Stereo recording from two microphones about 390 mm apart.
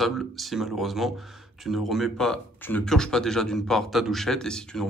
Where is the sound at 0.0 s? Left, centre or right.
Centre.